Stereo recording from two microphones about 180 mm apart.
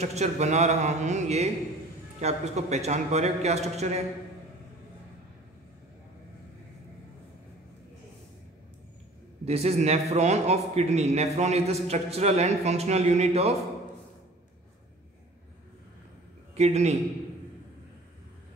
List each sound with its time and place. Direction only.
0.0 s a man's voice: 40° right (ahead or behind)
9.4 s a man's voice: 35° right (ahead or behind)
16.5 s a man's voice: 35° right (ahead or behind)